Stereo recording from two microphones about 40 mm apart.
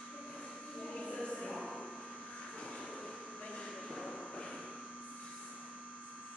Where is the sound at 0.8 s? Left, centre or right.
Centre.